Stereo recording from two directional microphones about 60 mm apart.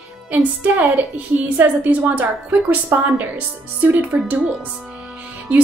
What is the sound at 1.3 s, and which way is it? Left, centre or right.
A woman's voice, right.